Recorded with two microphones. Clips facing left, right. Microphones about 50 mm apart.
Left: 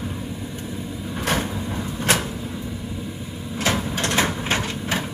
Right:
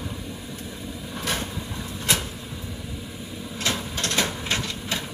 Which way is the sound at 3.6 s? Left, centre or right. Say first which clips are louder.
Left 5 dB; left.